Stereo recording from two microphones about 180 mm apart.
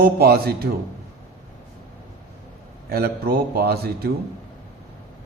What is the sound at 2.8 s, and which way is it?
A man's voice, 60° right (ahead or behind).